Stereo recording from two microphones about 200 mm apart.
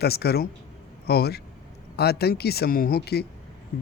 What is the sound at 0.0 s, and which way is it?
Speech, 55° left (ahead or behind).